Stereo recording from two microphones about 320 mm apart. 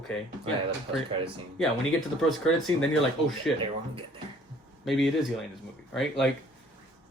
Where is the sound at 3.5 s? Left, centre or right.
Centre.